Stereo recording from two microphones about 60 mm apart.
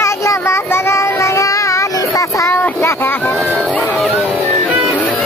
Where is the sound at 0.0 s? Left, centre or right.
Left.